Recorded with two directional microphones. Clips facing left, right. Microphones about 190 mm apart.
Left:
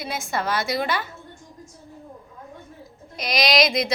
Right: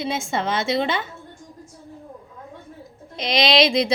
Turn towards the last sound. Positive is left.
turn(degrees=-30)  # may be behind; listen again after turning